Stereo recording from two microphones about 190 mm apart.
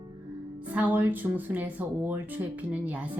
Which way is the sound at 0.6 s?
10° right (ahead or behind).